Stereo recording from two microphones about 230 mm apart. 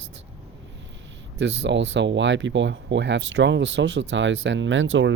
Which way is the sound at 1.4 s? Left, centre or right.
Right.